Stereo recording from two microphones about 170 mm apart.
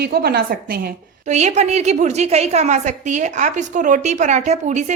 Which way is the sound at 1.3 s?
40° right (ahead or behind).